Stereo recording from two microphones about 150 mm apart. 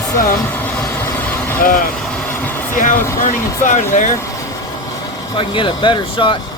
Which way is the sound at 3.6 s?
55° left (ahead or behind).